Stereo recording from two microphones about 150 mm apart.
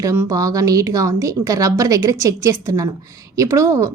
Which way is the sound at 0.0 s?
20° right (ahead or behind).